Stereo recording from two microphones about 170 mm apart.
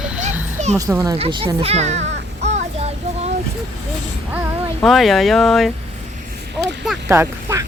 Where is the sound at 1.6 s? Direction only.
40° right (ahead or behind).